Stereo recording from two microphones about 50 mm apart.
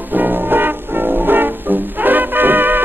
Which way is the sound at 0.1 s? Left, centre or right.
Right.